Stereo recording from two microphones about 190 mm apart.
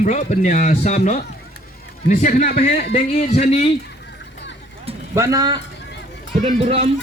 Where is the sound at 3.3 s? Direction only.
35° left (ahead or behind).